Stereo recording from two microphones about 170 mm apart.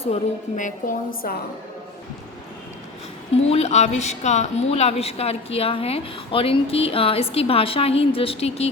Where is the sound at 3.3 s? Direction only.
40° left (ahead or behind).